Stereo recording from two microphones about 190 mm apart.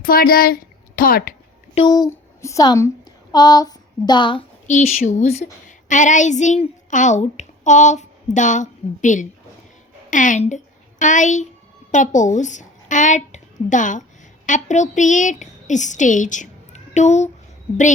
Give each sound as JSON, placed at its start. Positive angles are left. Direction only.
{"t": 0.0, "sound": "a woman's voice", "side_deg": 50}
{"t": 1.7, "sound": "a woman's voice", "side_deg": 25}
{"t": 4.6, "sound": "a child's voice", "side_deg": 40}